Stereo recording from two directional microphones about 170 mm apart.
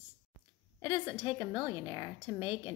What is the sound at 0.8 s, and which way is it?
A woman's voice, 25° left (ahead or behind).